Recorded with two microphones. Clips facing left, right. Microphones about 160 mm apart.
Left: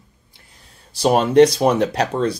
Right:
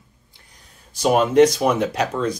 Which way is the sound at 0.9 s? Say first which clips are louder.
Left 1 dB; 35° left (ahead or behind).